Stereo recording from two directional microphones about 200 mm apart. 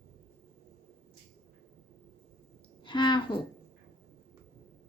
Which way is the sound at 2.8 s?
20° left (ahead or behind).